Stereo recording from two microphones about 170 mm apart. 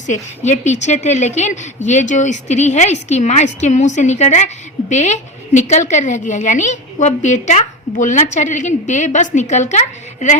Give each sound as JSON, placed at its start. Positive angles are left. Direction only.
{"t": 0.0, "sound": "a woman's voice", "side_deg": 45}